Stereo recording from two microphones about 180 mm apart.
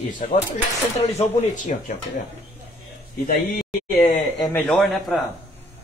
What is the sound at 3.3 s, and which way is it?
Speech, 55° left (ahead or behind).